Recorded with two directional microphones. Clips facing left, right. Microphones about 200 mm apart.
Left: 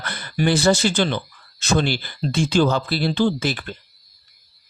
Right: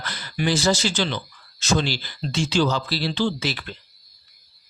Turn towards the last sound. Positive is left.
turn(degrees=50)  # may be behind; listen again after turning